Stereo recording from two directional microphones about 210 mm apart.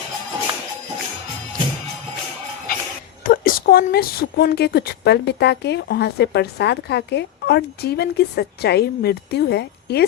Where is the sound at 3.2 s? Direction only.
45° left (ahead or behind).